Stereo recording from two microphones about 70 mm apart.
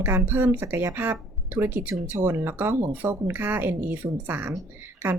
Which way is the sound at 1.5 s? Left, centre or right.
Right.